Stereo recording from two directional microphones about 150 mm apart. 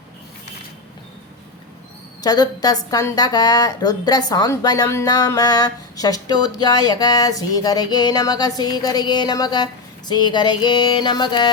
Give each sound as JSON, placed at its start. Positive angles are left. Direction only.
{"t": 2.2, "sound": "a woman's voice", "side_deg": 25}